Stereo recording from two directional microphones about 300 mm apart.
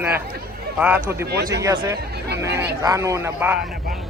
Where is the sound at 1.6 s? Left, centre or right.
Centre.